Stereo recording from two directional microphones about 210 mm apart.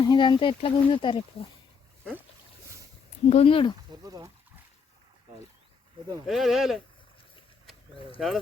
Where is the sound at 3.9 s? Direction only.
15° right (ahead or behind).